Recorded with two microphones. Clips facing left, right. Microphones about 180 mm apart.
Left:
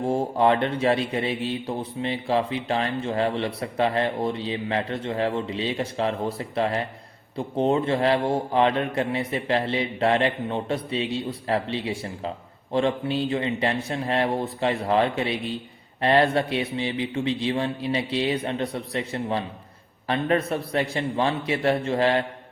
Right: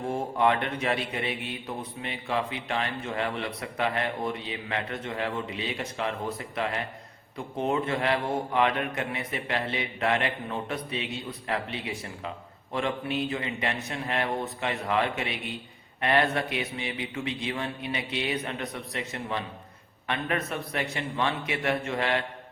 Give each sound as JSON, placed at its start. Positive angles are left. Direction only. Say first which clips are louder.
{"t": 0.0, "sound": "a man's voice", "louder": "left 4 dB", "side_deg": 30}